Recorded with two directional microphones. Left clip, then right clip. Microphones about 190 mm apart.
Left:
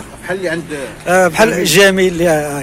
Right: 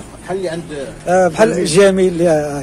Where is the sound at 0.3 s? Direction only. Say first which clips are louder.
Left 2 dB; 30° left (ahead or behind).